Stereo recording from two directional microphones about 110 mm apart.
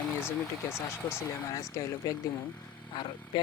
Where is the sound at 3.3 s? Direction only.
45° left (ahead or behind).